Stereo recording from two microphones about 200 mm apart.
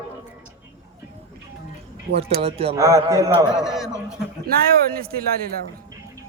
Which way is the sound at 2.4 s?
30° right (ahead or behind).